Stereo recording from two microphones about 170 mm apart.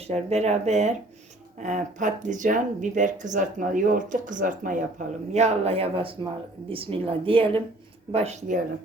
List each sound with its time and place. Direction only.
0.1 s speech: 40° right (ahead or behind)
5.3 s speech: 40° right (ahead or behind)